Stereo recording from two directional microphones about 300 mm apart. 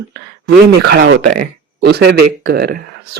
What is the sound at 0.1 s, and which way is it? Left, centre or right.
Speech, right.